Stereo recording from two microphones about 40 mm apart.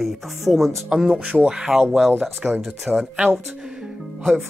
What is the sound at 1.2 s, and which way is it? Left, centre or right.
Speech, right.